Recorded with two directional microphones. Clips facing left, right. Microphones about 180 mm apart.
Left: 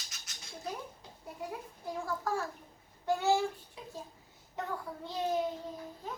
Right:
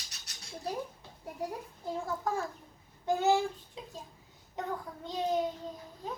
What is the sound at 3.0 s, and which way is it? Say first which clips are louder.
Child singing: right 2 dB; 20° right (ahead or behind).